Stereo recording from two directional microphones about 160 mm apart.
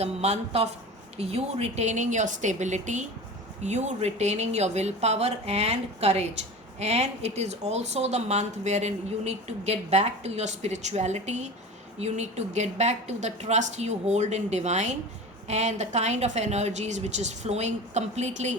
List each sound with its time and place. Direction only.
0.0 s a woman's voice: 40° right (ahead or behind)